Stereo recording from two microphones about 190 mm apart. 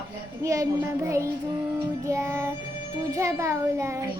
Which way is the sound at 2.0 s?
15° right (ahead or behind).